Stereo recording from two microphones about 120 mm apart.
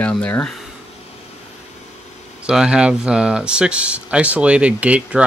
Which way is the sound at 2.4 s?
10° right (ahead or behind).